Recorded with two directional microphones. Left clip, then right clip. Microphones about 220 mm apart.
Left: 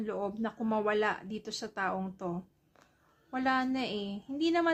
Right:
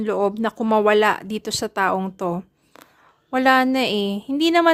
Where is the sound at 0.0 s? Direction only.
50° right (ahead or behind).